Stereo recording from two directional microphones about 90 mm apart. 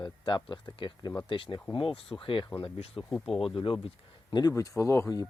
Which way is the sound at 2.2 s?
70° left (ahead or behind).